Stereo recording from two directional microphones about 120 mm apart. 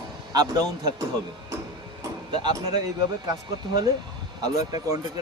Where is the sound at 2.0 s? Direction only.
35° right (ahead or behind).